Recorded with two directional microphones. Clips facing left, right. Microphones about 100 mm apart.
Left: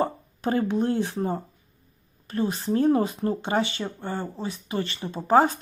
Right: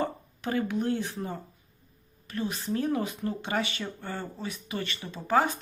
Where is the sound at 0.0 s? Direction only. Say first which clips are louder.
Left 5 dB; 35° left (ahead or behind).